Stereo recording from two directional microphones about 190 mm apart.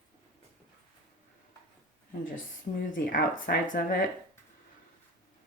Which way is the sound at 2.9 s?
45° left (ahead or behind).